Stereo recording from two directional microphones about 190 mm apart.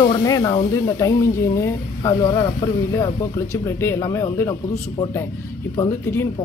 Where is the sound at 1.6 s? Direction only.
15° left (ahead or behind).